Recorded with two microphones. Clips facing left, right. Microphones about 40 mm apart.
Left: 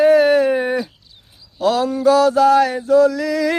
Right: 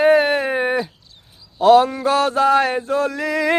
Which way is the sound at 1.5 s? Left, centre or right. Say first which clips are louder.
Right 5 dB; right.